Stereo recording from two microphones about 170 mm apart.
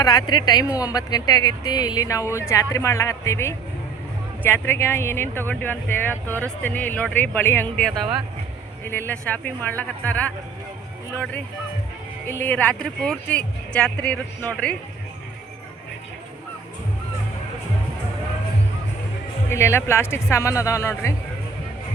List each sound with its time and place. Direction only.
0.0 s speech: 25° left (ahead or behind); by 14.8 s 10° left (ahead or behind)
19.5 s speech: 15° left (ahead or behind)